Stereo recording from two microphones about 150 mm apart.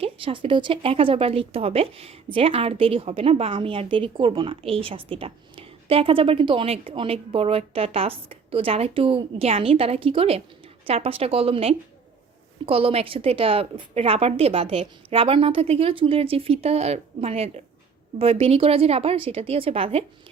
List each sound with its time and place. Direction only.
0.0 s speech: 35° right (ahead or behind)